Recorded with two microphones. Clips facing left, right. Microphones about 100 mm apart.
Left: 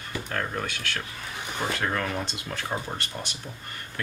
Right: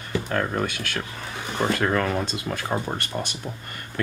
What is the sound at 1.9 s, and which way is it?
Speech, 50° right (ahead or behind).